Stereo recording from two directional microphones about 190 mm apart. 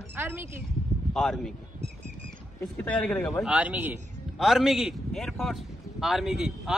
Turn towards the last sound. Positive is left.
turn(degrees=0)  # may be behind; listen again after turning